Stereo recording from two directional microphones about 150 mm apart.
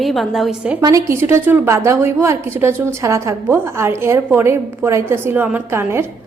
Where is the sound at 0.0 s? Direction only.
Centre (ahead or behind).